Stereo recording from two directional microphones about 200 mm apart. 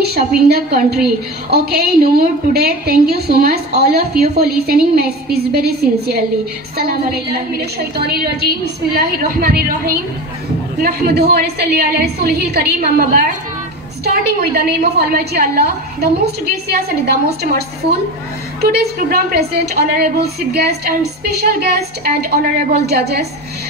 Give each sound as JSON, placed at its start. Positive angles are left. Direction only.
{"t": 0.0, "sound": "a woman's voice", "side_deg": -50}